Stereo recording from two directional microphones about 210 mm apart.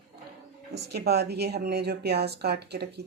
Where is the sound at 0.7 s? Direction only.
50° right (ahead or behind).